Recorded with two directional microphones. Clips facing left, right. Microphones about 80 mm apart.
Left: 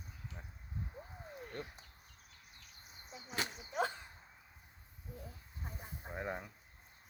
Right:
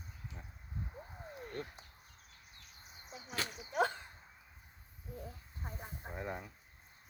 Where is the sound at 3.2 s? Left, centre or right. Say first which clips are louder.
Even; left.